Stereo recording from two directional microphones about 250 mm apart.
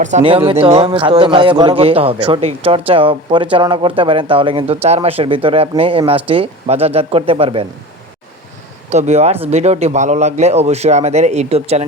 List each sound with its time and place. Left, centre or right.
0.0 s a man's voice: right
8.9 s a man's voice: right